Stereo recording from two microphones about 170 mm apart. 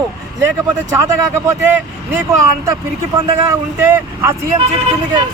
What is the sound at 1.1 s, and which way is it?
Speech, 15° right (ahead or behind).